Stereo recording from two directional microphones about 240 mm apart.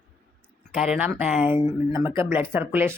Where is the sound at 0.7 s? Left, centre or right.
Centre.